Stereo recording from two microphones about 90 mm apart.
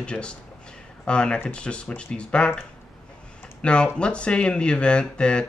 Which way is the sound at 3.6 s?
10° left (ahead or behind).